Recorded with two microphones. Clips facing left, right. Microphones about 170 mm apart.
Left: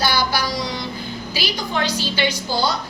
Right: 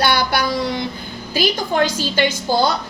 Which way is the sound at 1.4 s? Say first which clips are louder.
Right 7 dB; 45° right (ahead or behind).